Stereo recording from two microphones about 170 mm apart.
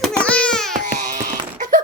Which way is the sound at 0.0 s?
5° left (ahead or behind).